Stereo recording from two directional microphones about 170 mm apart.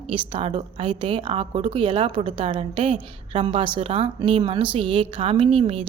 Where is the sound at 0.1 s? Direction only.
30° right (ahead or behind).